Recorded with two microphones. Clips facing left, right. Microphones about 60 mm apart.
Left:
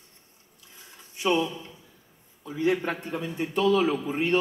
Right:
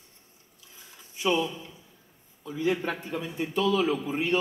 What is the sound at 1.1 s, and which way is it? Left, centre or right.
A man's voice, left.